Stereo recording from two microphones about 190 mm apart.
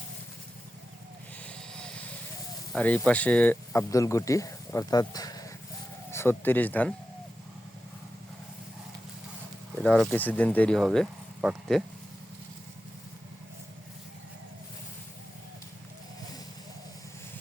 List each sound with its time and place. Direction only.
1.5 s vehicle: 5° left (ahead or behind)
2.7 s speech: 5° left (ahead or behind)
9.8 s speech: centre (ahead or behind)